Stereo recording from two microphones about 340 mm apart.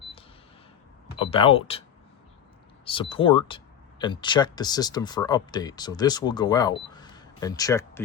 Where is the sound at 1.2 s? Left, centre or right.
Centre.